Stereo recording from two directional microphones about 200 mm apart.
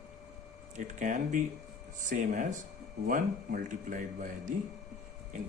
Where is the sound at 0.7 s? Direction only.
40° right (ahead or behind).